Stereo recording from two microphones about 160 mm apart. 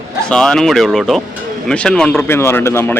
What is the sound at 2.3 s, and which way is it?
Speech, 15° left (ahead or behind).